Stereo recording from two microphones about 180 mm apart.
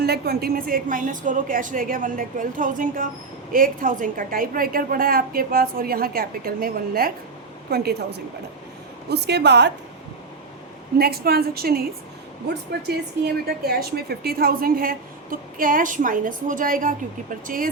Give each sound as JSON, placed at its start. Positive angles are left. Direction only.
{"t": 0.0, "sound": "a woman's voice", "side_deg": -60}
{"t": 10.9, "sound": "a woman's voice", "side_deg": -60}
{"t": 12.9, "sound": "a woman's voice", "side_deg": -60}